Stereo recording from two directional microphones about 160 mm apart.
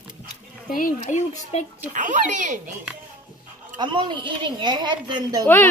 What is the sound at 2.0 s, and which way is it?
Speech, 50° right (ahead or behind).